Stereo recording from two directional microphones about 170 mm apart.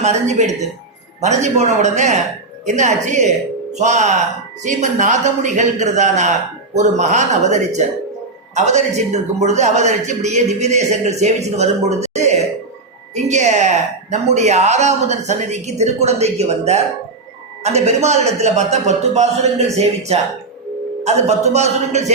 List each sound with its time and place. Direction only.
0.0 s a man's voice: 40° right (ahead or behind)